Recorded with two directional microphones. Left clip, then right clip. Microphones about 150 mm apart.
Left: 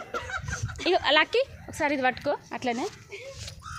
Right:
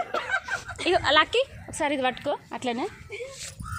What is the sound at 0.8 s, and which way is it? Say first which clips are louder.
A woman's voice: right 1 dB; 15° left (ahead or behind).